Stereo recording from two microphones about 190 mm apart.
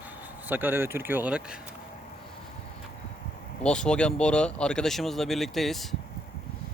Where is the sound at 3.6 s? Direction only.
5° left (ahead or behind).